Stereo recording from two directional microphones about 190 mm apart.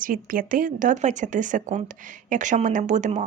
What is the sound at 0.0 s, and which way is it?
Speech, 45° right (ahead or behind).